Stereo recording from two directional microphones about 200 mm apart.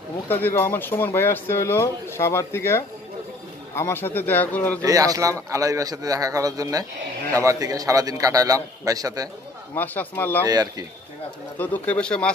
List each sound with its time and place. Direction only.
0.3 s speech: 10° left (ahead or behind)
4.8 s a man's voice: 15° right (ahead or behind)
9.8 s speech: 10° left (ahead or behind)
10.4 s speech: 20° right (ahead or behind)
11.5 s speech: 10° left (ahead or behind)